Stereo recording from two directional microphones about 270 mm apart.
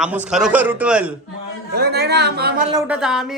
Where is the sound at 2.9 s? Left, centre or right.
Centre.